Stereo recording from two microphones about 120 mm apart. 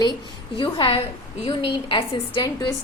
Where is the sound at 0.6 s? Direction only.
45° left (ahead or behind).